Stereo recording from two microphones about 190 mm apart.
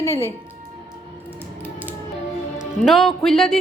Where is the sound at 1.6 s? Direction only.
10° right (ahead or behind).